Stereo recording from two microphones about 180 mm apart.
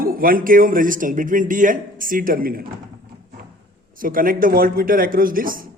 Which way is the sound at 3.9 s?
50° right (ahead or behind).